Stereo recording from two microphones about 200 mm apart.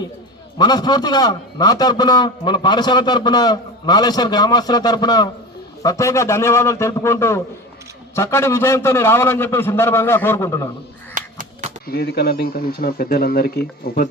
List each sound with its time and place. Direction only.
0.6 s a man's voice: 20° left (ahead or behind)
11.1 s crow: 40° right (ahead or behind)
11.9 s speech: 55° left (ahead or behind)